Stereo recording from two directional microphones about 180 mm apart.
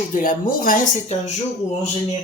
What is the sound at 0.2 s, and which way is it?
Speech, 50° left (ahead or behind).